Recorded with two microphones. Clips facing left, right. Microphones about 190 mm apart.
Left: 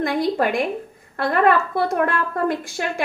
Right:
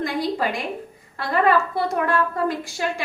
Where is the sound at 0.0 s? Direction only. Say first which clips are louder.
Left 3 dB; 55° left (ahead or behind).